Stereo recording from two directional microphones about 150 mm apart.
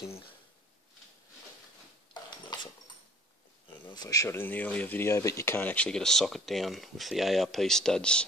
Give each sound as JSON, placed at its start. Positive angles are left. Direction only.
{"t": 3.9, "sound": "speech", "side_deg": 25}